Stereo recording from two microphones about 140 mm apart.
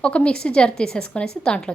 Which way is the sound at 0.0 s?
10° left (ahead or behind).